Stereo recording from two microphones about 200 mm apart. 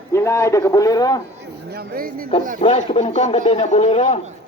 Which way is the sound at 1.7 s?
50° right (ahead or behind).